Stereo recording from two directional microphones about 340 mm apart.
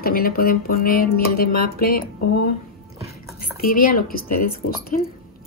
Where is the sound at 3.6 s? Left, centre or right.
Left.